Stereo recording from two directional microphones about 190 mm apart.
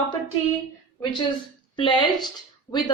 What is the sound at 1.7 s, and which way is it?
A woman's voice, 25° left (ahead or behind).